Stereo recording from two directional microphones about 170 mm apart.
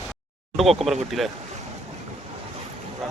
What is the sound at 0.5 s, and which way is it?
Speech, centre (ahead or behind).